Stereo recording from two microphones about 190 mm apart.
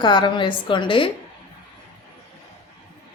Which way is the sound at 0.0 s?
25° left (ahead or behind).